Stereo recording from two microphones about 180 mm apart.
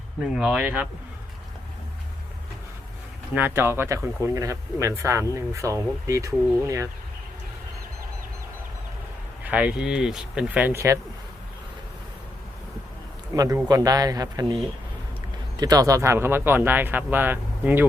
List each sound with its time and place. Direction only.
0.2 s speech: 5° right (ahead or behind)
3.3 s speech: 10° right (ahead or behind)
9.4 s speech: 10° right (ahead or behind)
13.3 s speech: 20° right (ahead or behind)